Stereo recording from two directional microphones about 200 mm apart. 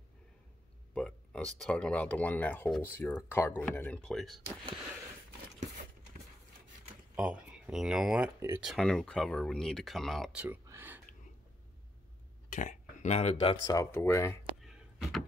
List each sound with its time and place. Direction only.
0.9 s speech: 5° left (ahead or behind)
7.2 s speech: 5° right (ahead or behind)
12.4 s a sound: 35° left (ahead or behind)
13.7 s speech: 15° left (ahead or behind)
14.6 s door: centre (ahead or behind)